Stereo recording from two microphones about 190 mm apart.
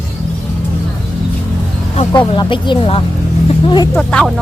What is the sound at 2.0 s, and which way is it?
Speech, 25° left (ahead or behind).